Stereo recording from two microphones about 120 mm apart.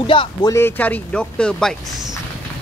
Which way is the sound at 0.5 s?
20° left (ahead or behind).